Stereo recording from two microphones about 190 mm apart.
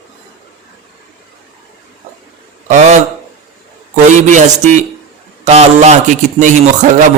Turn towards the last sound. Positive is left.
turn(degrees=-40)  # may be behind; listen again after turning